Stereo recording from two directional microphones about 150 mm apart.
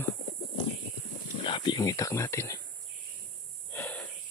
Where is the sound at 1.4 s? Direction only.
30° left (ahead or behind).